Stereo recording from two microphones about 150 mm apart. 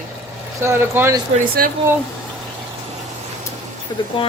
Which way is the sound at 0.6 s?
15° right (ahead or behind).